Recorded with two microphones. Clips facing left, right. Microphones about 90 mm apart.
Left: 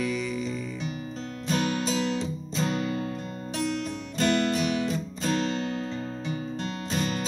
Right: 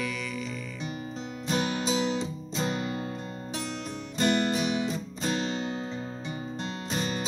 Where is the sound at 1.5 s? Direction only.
10° right (ahead or behind).